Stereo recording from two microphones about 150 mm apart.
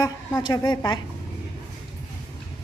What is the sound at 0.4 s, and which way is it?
Speech, 25° left (ahead or behind).